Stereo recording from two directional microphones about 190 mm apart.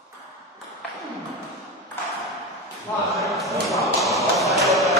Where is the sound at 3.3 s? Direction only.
Centre (ahead or behind).